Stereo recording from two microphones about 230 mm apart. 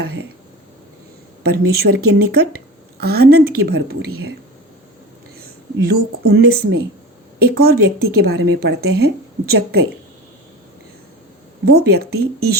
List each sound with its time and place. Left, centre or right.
0.0 s a sound: right
1.5 s speech: right
5.4 s speech: right
11.6 s speech: right